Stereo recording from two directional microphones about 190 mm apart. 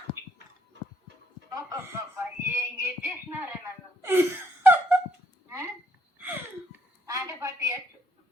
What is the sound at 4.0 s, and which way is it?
Gasp, 10° right (ahead or behind).